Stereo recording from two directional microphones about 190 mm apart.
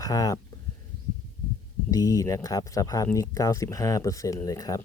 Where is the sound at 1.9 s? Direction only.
20° left (ahead or behind).